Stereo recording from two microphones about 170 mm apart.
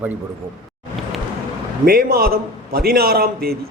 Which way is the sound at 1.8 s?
60° right (ahead or behind).